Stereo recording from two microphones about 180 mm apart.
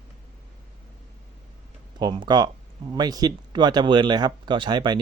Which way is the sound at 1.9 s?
25° right (ahead or behind).